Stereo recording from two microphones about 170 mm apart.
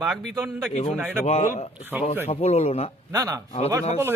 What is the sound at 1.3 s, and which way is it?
A man's voice, 45° left (ahead or behind).